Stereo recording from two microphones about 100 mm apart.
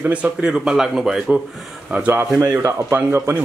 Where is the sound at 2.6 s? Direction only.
30° right (ahead or behind).